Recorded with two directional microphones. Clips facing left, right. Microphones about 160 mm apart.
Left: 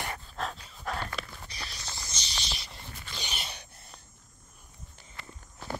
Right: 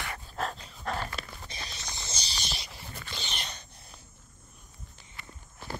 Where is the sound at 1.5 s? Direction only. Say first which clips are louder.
Right 1 dB; 20° right (ahead or behind).